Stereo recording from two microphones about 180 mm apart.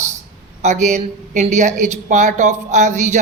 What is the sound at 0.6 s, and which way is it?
A woman's voice, 40° right (ahead or behind).